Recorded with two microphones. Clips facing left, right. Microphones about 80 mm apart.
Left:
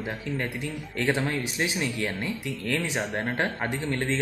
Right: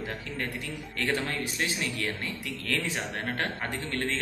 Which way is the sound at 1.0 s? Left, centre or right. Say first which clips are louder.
Left 4 dB; centre.